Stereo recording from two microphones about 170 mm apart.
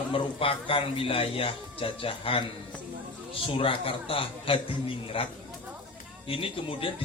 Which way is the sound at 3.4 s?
30° left (ahead or behind).